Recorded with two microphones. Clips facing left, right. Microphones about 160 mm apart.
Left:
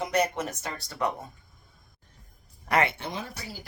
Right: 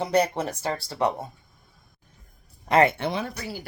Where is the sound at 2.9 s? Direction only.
65° right (ahead or behind).